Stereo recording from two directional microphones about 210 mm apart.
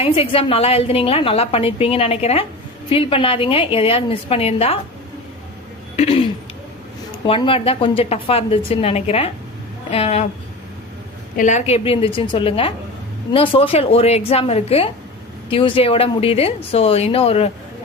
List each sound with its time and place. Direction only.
0.0 s a woman's voice: 25° left (ahead or behind)
6.0 s a woman's voice: 25° left (ahead or behind)
11.3 s a woman's voice: 35° left (ahead or behind)